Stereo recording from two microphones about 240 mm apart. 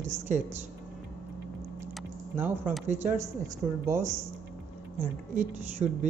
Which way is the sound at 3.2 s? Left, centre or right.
Centre.